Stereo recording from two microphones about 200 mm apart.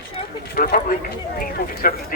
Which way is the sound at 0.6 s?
45° left (ahead or behind).